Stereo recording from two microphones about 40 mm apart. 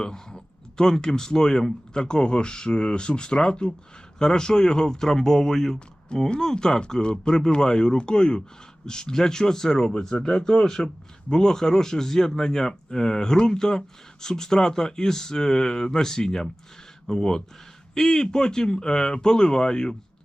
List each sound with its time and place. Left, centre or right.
0.0 s speech: centre